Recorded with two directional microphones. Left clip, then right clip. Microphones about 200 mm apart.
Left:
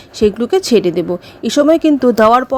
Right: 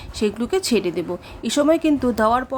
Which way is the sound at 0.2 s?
20° left (ahead or behind).